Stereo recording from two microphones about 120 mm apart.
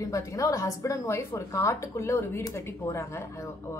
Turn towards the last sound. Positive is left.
turn(degrees=20)  # may be behind; listen again after turning